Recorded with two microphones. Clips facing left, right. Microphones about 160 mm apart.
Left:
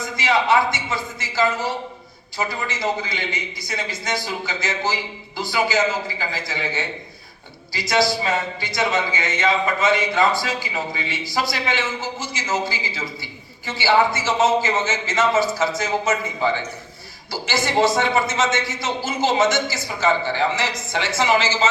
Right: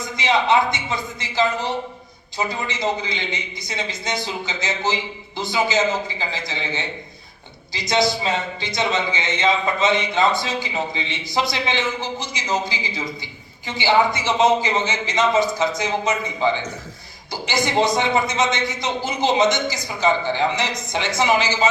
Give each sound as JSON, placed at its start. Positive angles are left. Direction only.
{"t": 0.2, "sound": "a man's voice", "side_deg": -20}